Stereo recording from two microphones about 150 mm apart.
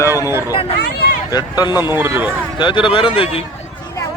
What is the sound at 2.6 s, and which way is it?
Speech, 30° left (ahead or behind).